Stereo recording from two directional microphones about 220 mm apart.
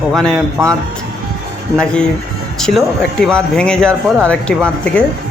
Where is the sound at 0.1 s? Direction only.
Centre (ahead or behind).